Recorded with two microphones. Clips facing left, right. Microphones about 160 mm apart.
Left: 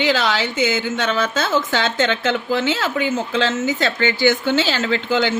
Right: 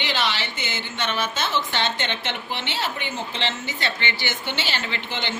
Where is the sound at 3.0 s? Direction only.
90° left.